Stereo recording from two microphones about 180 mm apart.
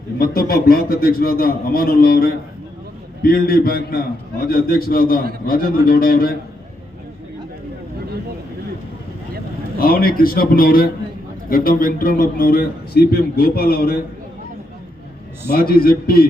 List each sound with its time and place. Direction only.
0.2 s a man's voice: 55° left (ahead or behind)
9.8 s a man's voice: 55° left (ahead or behind)
15.5 s a man's voice: 55° left (ahead or behind)